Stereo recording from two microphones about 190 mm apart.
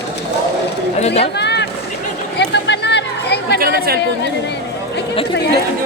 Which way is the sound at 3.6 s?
55° right (ahead or behind).